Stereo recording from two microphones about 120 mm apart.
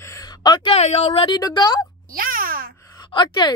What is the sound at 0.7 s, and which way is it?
Speech, 60° left (ahead or behind).